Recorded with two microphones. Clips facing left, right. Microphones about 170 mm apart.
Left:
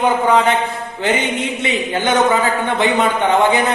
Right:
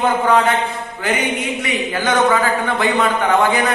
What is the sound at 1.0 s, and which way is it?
Speech, 25° left (ahead or behind).